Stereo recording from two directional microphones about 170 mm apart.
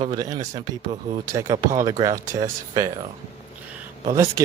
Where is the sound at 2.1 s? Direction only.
50° right (ahead or behind).